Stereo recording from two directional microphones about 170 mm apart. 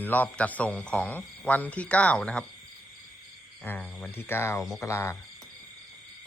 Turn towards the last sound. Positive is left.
turn(degrees=15)  # may be behind; listen again after turning